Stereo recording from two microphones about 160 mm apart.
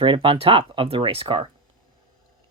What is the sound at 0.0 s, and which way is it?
Speech, 30° right (ahead or behind).